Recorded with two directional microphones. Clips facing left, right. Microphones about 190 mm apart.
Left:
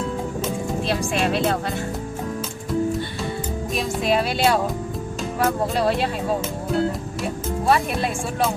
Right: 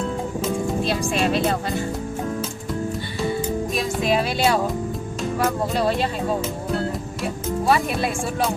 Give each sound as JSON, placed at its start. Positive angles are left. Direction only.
{"t": 0.4, "sound": "speech", "side_deg": 0}
{"t": 3.8, "sound": "speech", "side_deg": 0}
{"t": 7.7, "sound": "speech", "side_deg": 0}